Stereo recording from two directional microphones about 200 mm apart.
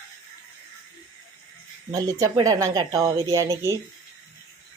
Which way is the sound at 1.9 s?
15° right (ahead or behind).